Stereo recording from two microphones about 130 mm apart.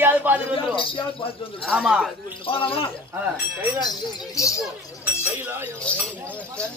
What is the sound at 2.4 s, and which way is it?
Speech, 45° left (ahead or behind).